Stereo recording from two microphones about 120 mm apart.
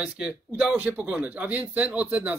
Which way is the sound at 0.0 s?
10° right (ahead or behind).